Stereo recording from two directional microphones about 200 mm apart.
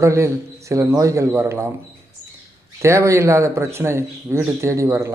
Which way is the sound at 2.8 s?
15° right (ahead or behind).